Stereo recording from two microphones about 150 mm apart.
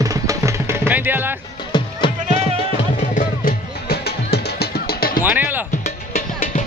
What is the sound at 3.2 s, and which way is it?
Music, 80° left.